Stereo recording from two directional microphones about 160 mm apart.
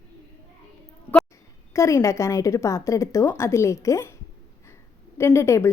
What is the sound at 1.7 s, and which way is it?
A woman's voice, 20° left (ahead or behind).